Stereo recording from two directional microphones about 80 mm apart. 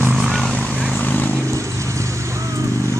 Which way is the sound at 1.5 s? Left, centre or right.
Right.